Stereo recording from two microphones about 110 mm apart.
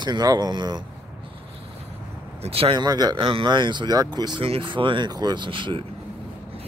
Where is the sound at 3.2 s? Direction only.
50° right (ahead or behind).